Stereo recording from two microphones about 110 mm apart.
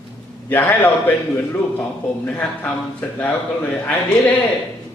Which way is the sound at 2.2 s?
10° left (ahead or behind).